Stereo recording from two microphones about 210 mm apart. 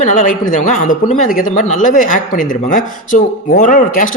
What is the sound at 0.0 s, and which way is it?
Speech, 35° left (ahead or behind).